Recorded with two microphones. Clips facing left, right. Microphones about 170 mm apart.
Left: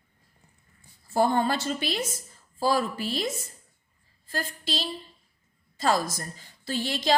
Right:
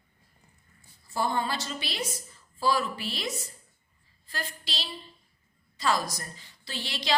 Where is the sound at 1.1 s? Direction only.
50° left (ahead or behind).